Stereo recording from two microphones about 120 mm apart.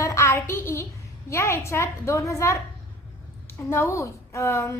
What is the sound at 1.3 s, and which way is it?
A woman's voice, 25° left (ahead or behind).